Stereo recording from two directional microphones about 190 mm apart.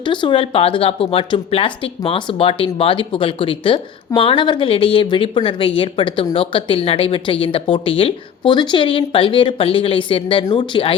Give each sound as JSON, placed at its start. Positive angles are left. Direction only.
{"t": 0.0, "sound": "speech", "side_deg": 25}